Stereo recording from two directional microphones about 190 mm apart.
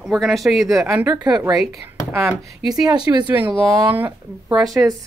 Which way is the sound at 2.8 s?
25° right (ahead or behind).